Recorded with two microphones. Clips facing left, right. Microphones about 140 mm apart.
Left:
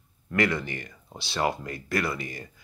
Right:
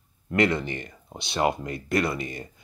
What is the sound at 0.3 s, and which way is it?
Speech, 25° right (ahead or behind).